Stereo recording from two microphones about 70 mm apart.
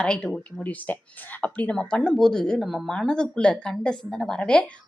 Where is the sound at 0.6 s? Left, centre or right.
Left; by 2.9 s centre.